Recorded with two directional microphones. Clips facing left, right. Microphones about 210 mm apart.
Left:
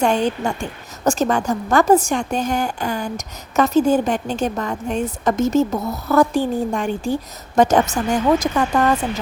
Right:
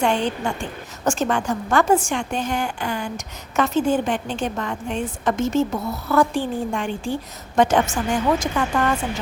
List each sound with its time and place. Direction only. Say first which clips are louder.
0.0 s a woman's voice: left 3 dB; 40° left (ahead or behind)